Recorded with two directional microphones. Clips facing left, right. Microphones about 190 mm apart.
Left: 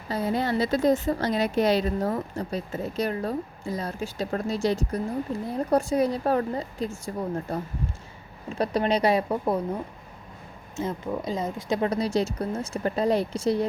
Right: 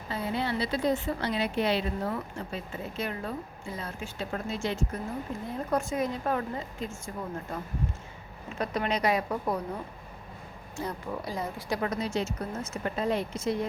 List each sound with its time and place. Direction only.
0.1 s a woman's voice: 40° left (ahead or behind)
10.8 s speech: 20° left (ahead or behind)
11.9 s a woman's voice: 35° left (ahead or behind)